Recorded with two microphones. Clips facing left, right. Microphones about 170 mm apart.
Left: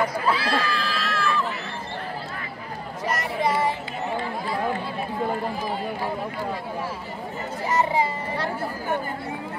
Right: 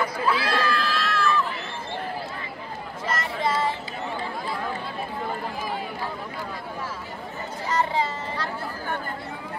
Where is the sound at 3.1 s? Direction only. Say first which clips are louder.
Left 2 dB; 15° left (ahead or behind).